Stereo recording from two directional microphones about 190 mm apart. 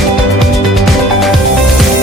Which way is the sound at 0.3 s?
Centre (ahead or behind).